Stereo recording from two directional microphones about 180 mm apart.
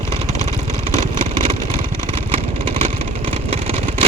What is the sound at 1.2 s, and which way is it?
Vehicle, 30° right (ahead or behind).